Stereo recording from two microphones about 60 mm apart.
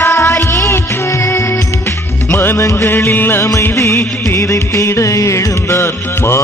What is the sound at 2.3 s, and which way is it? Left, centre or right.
Music, left.